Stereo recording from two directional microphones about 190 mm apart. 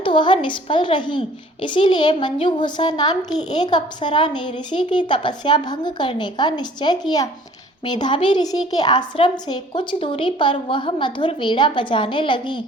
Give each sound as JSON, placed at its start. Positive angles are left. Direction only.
{"t": 0.0, "sound": "a woman's voice", "side_deg": 25}